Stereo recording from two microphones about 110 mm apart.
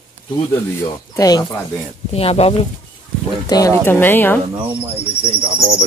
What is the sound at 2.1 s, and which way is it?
Speech, 65° left (ahead or behind).